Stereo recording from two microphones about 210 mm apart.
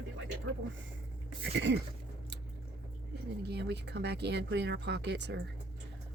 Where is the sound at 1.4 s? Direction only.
55° right (ahead or behind).